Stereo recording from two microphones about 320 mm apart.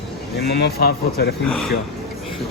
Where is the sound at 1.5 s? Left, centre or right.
Centre.